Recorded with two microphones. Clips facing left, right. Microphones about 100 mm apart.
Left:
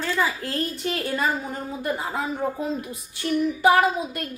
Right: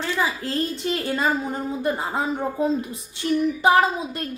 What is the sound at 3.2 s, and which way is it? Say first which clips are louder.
Speech: even; 25° right (ahead or behind).